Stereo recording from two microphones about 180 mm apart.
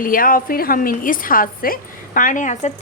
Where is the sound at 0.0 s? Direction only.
50° left (ahead or behind).